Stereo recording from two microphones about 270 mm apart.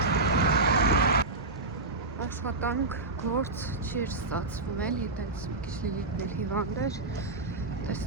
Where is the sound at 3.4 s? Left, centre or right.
Centre.